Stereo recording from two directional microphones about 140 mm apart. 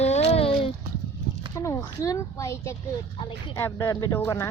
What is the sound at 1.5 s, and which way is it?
Speech, 25° left (ahead or behind).